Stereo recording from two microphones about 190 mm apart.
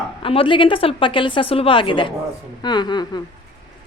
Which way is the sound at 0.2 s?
30° left (ahead or behind).